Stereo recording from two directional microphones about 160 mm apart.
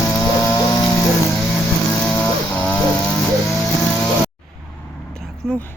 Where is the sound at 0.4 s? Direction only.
25° left (ahead or behind).